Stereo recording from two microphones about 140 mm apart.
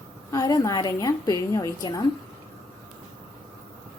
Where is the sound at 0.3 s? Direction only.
25° left (ahead or behind).